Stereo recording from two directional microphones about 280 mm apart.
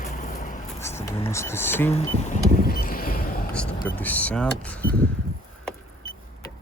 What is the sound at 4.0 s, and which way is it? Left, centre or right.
Speech, centre.